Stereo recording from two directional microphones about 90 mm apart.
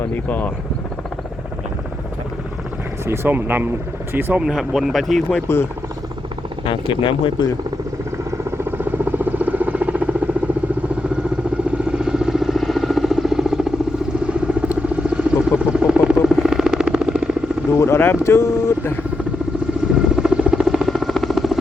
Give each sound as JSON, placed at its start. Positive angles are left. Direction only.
{"t": 0.0, "sound": "speech", "side_deg": 20}
{"t": 3.1, "sound": "speech", "side_deg": -25}
{"t": 4.4, "sound": "speech", "side_deg": -5}
{"t": 5.5, "sound": "speech", "side_deg": 30}
{"t": 6.7, "sound": "speech", "side_deg": 65}
{"t": 8.4, "sound": "rodents", "side_deg": -25}
{"t": 11.9, "sound": "vehicle", "side_deg": -10}
{"t": 17.7, "sound": "speech", "side_deg": 25}
{"t": 20.1, "sound": "helicopter", "side_deg": -5}